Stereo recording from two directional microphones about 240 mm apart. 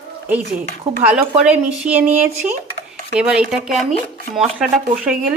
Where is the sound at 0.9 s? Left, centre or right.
Right.